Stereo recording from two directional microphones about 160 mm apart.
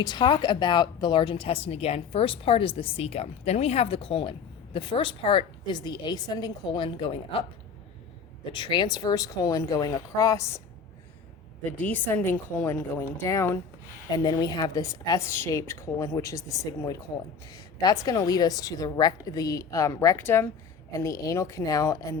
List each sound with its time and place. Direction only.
0.0 s speech: 25° left (ahead or behind)
8.5 s a woman's voice: 30° left (ahead or behind)
11.6 s a woman's voice: 10° left (ahead or behind)